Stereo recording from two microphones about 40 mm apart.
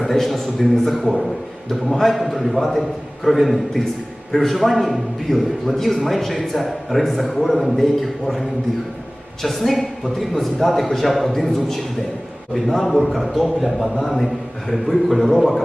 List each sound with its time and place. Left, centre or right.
0.0 s a man's voice: centre